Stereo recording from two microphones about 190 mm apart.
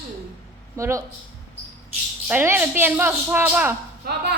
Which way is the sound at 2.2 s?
10° right (ahead or behind).